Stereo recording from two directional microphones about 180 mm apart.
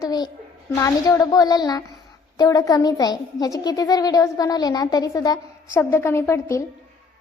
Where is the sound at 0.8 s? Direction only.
20° left (ahead or behind).